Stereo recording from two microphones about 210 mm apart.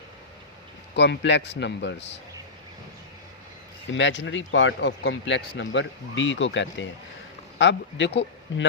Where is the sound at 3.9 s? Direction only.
60° left (ahead or behind).